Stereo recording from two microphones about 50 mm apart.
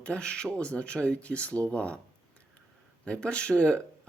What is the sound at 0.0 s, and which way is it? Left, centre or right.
Speech, left.